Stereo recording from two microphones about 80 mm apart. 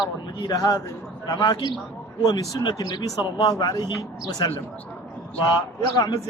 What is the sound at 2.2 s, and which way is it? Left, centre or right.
A man's voice, left.